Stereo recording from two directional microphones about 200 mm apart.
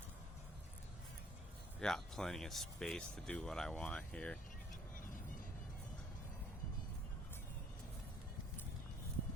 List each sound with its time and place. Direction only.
1.8 s speech: 5° left (ahead or behind)